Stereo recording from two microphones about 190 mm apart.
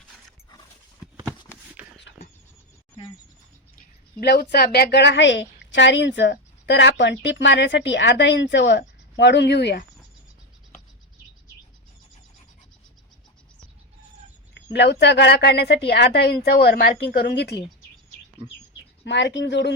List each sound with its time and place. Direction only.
1.8 s a sound: 5° right (ahead or behind)
4.2 s a woman's voice: 60° left (ahead or behind)
14.5 s a woman's voice: 65° left (ahead or behind)
19.0 s a woman's voice: 70° left (ahead or behind)